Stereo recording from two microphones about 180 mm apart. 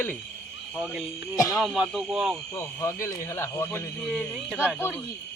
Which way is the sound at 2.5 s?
15° left (ahead or behind).